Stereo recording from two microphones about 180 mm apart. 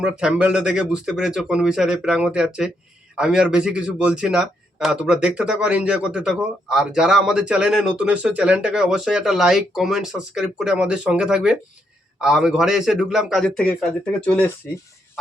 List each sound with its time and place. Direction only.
0.0 s speech: 5° right (ahead or behind)